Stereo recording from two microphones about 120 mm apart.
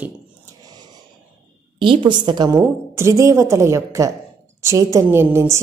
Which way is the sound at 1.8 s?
45° right (ahead or behind).